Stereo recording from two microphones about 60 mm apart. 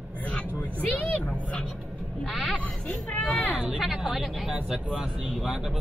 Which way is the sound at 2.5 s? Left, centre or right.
Centre.